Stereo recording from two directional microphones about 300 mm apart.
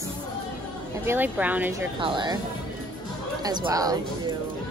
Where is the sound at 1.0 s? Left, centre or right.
Centre.